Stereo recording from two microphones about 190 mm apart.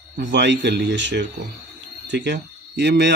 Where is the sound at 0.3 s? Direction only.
70° right (ahead or behind).